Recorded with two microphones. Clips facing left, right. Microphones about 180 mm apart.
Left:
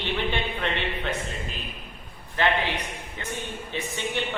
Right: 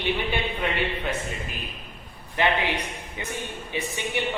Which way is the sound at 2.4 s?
15° right (ahead or behind).